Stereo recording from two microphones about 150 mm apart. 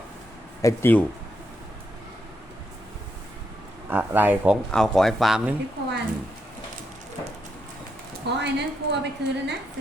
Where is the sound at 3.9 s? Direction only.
15° right (ahead or behind).